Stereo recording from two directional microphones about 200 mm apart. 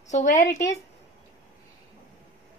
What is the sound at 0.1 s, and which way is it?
Speech, 35° left (ahead or behind).